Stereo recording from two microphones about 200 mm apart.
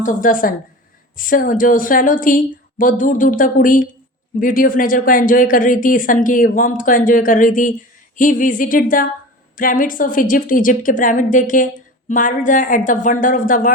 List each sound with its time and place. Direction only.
0.0 s a woman's voice: 40° left (ahead or behind)